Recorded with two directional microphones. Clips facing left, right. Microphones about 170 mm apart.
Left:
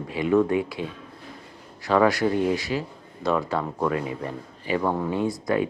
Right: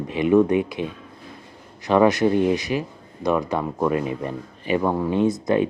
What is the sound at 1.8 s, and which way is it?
Speech, 20° right (ahead or behind).